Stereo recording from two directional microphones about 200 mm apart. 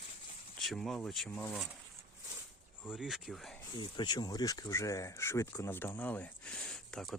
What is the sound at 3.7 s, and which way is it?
Speech, 20° left (ahead or behind).